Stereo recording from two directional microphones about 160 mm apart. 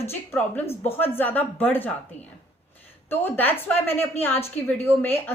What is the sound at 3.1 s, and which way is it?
A woman's voice, 10° left (ahead or behind).